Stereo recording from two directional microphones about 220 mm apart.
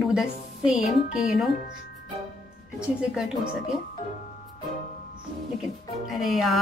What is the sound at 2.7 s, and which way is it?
Speech, 5° right (ahead or behind).